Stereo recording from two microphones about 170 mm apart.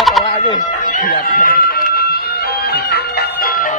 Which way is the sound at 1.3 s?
55° left (ahead or behind).